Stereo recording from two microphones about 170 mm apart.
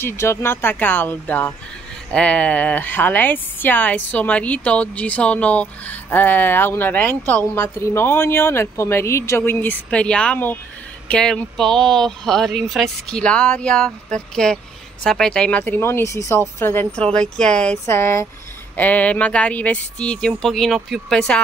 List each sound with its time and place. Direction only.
0.0 s a woman's voice: 15° left (ahead or behind)
17.8 s a woman's voice: 15° left (ahead or behind)